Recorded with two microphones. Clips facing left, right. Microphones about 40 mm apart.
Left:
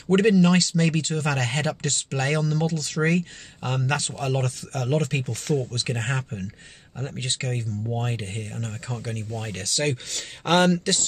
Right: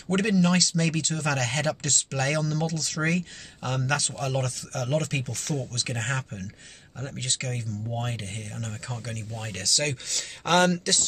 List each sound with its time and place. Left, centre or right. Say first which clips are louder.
0.1 s speech: left 5 dB; centre